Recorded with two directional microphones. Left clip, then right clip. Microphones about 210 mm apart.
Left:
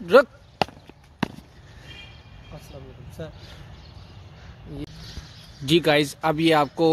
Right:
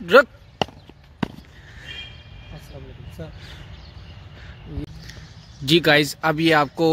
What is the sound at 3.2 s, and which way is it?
Speech, centre (ahead or behind).